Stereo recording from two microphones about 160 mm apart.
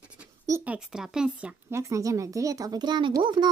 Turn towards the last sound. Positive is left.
turn(degrees=-30)  # may be behind; listen again after turning